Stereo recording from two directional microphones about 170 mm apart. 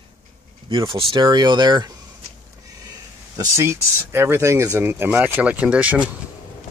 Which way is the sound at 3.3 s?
15° right (ahead or behind).